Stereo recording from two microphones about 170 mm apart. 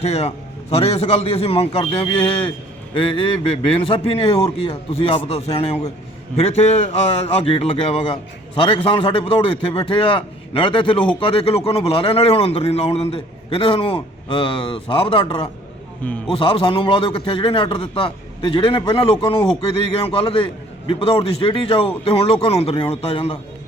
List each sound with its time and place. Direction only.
0.0 s a man's voice: 40° left (ahead or behind)
16.0 s a man's voice: 10° left (ahead or behind)
16.3 s a man's voice: 35° left (ahead or behind)